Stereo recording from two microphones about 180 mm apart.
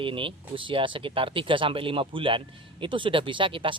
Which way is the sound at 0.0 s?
30° right (ahead or behind).